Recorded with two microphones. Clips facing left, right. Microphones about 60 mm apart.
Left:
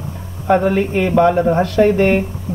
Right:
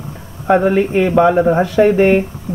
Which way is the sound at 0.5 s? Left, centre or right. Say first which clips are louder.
Right 2 dB; centre.